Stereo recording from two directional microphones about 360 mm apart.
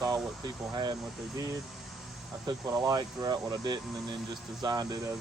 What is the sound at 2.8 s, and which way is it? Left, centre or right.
A woman's voice, centre.